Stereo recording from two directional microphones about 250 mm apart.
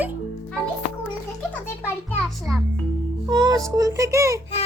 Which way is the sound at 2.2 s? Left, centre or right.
Centre.